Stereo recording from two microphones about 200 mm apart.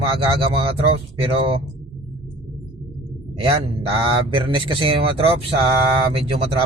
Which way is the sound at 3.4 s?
25° right (ahead or behind).